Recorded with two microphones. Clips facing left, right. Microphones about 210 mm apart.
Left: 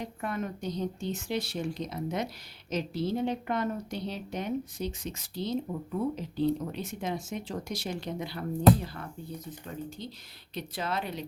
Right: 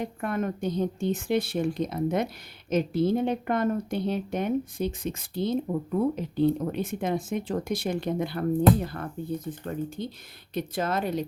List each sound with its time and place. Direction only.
0.0 s a woman's voice: 55° right (ahead or behind)